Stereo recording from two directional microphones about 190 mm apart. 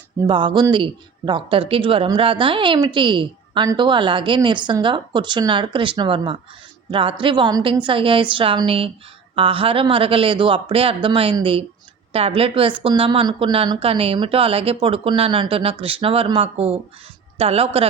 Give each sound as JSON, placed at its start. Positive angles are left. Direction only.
{"t": 0.3, "sound": "a woman's voice", "side_deg": -25}